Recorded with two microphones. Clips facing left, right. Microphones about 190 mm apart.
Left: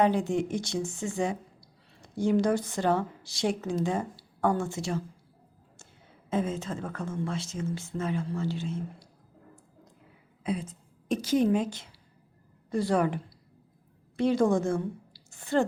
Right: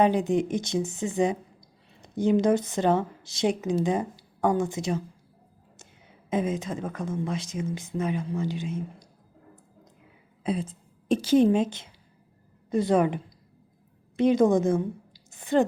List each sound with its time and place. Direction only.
0.0 s a woman's voice: 20° right (ahead or behind)
6.3 s speech: 15° right (ahead or behind)
10.4 s a woman's voice: 30° right (ahead or behind)